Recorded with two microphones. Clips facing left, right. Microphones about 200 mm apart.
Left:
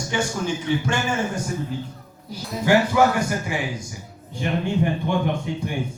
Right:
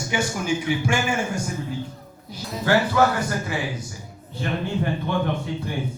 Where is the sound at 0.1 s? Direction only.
10° right (ahead or behind).